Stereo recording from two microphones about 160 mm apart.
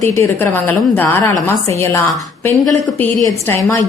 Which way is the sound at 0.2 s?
10° left (ahead or behind).